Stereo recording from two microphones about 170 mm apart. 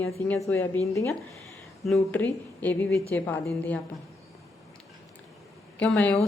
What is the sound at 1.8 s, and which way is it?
Speech, 5° left (ahead or behind).